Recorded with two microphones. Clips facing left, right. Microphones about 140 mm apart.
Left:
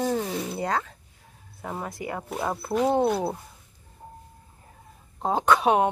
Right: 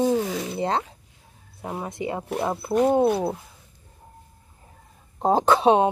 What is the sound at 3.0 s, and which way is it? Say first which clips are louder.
Speech: right 3 dB; centre (ahead or behind).